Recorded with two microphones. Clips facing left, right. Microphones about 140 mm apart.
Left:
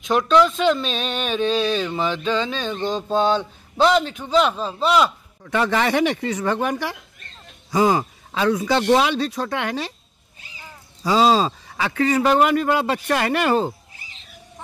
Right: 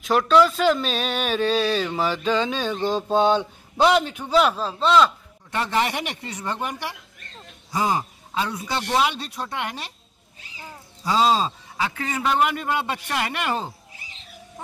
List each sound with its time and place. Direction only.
0.3 s speech: 5° right (ahead or behind)
5.4 s speech: 90° left
11.1 s speech: 90° left; by 12.2 s 70° left (ahead or behind)
12.2 s speech: 45° left (ahead or behind)
12.5 s a man's voice: 70° left (ahead or behind)